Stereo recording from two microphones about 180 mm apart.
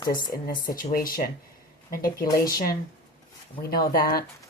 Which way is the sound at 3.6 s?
55° left (ahead or behind).